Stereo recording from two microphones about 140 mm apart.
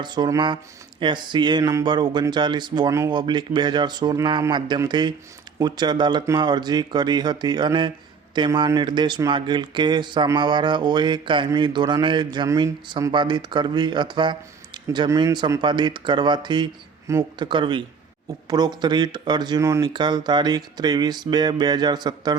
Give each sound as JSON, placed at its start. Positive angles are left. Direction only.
{"t": 0.0, "sound": "speech", "side_deg": -30}
{"t": 12.5, "sound": "speech", "side_deg": -20}